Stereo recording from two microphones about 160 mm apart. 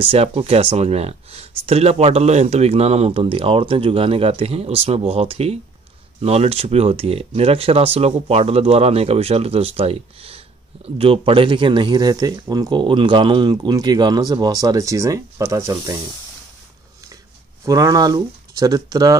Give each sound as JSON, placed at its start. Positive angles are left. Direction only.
{"t": 0.0, "sound": "speech", "side_deg": -35}
{"t": 17.6, "sound": "speech", "side_deg": -20}